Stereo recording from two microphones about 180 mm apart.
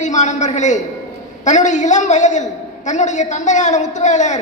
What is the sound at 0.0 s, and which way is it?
A man's voice, 40° left (ahead or behind).